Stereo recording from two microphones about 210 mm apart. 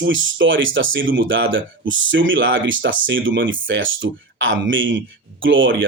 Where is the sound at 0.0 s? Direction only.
65° right (ahead or behind).